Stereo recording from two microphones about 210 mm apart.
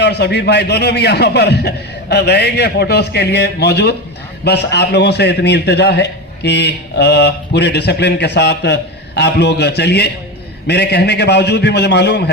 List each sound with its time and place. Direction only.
0.0 s a man's voice: 55° left (ahead or behind)